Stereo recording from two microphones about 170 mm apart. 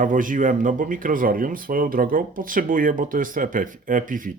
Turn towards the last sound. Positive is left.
turn(degrees=-50)  # may be behind; listen again after turning